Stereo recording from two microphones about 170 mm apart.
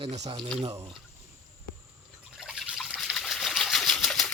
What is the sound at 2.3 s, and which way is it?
Water, 5° right (ahead or behind).